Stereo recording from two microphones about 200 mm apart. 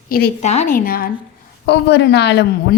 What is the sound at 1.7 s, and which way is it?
A woman's voice, 60° left (ahead or behind).